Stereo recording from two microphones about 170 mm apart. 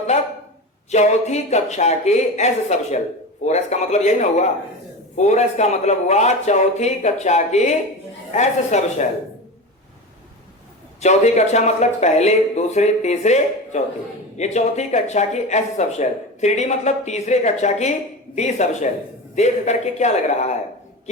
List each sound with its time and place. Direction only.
0.9 s speech: 40° left (ahead or behind)
11.0 s speech: 40° left (ahead or behind)